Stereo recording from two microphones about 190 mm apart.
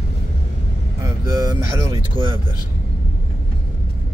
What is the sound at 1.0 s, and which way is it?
Speech, 20° right (ahead or behind).